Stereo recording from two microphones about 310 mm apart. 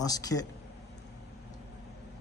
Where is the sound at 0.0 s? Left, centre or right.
Centre.